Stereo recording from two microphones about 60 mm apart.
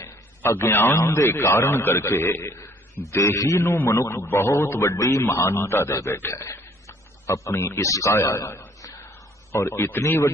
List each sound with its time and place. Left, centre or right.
0.4 s speech: left
0.9 s a man's voice: left
3.2 s speech: left
4.1 s speech: left
4.5 s a man's voice: left
4.9 s speech: left
5.2 s a man's voice: left
7.2 s speech: left
8.2 s a man's voice: left
9.5 s a man's voice: left